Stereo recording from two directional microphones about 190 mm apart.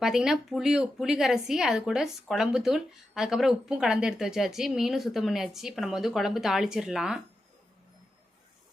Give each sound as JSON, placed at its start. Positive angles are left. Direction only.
{"t": 0.0, "sound": "a woman's voice", "side_deg": 0}